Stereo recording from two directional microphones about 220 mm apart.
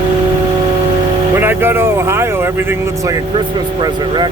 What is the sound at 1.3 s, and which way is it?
Vehicle, 10° right (ahead or behind).